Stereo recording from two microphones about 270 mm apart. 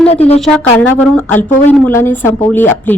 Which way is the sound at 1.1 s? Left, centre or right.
Centre.